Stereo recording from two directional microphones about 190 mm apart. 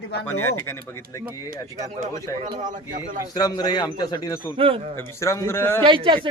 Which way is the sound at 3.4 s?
20° left (ahead or behind).